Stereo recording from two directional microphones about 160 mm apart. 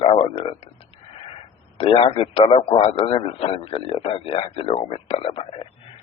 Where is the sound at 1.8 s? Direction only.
35° left (ahead or behind).